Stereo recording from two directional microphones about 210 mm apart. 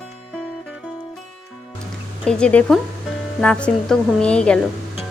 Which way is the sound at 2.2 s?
5° left (ahead or behind).